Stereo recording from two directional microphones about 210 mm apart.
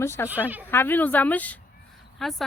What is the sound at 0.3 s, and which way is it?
Speech, 10° right (ahead or behind).